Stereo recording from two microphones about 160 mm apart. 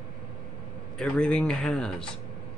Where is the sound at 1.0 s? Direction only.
5° left (ahead or behind).